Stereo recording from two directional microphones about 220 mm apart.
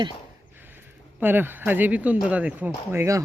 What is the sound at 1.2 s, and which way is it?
Speech, 10° right (ahead or behind).